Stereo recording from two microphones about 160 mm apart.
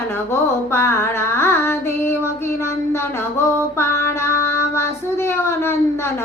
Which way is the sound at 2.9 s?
15° left (ahead or behind).